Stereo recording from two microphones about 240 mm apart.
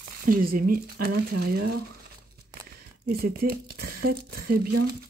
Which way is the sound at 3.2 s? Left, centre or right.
Right.